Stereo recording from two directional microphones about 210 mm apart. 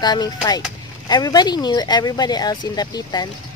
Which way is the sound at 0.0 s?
20° left (ahead or behind).